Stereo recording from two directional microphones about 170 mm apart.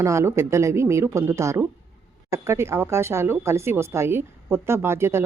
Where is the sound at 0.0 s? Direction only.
15° right (ahead or behind).